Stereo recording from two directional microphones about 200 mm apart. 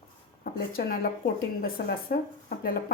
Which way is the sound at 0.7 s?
50° left (ahead or behind).